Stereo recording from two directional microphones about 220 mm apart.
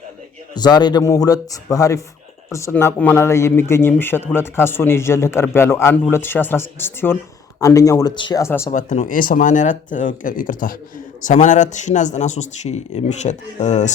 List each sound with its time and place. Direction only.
0.5 s a man's voice: 20° left (ahead or behind)
8.7 s speech: 35° left (ahead or behind)